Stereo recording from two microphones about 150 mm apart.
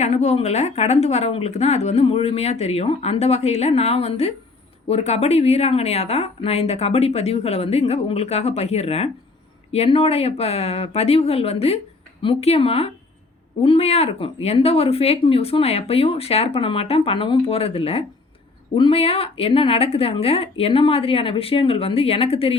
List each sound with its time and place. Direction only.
0.0 s a woman's voice: 50° left (ahead or behind)